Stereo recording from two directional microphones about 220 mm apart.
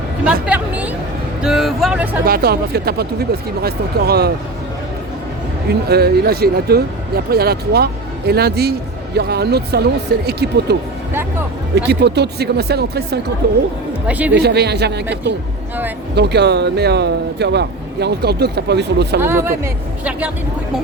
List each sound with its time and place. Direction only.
0.4 s a sound: 5° right (ahead or behind)
1.4 s speech: centre (ahead or behind)
2.2 s speech: 45° right (ahead or behind)
5.9 s speech: 45° right (ahead or behind)
11.9 s speech: 50° right (ahead or behind)
14.1 s a woman's voice: 5° right (ahead or behind)
14.3 s speech: 50° right (ahead or behind)
19.2 s a woman's voice: 10° right (ahead or behind)